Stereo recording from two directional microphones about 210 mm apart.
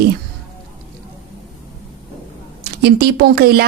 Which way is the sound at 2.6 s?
50° right (ahead or behind).